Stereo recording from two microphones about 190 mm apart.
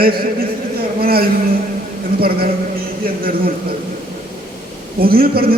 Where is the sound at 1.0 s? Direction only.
50° right (ahead or behind).